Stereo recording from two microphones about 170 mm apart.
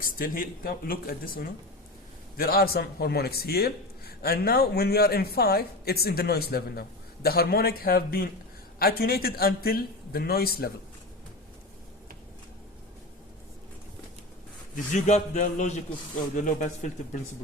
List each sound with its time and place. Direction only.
0.0 s a man's voice: 60° left (ahead or behind)
14.9 s a man's voice: 45° left (ahead or behind)